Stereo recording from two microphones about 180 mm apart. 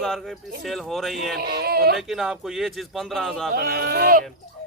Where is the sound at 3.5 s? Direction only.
60° right (ahead or behind).